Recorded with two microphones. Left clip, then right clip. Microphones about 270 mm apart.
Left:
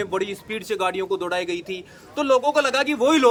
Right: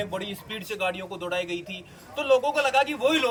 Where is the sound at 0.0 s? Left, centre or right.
Centre.